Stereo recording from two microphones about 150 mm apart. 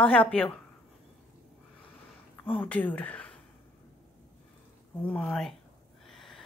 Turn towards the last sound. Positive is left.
turn(degrees=5)  # may be behind; listen again after turning